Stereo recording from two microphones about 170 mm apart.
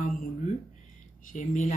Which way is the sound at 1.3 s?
50° left (ahead or behind).